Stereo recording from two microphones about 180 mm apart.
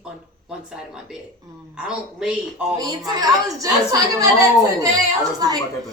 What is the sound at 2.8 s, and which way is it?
A woman's voice, 25° right (ahead or behind).